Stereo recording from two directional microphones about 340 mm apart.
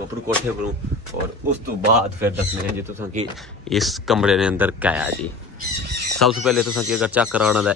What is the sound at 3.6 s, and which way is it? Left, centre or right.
Speech, centre.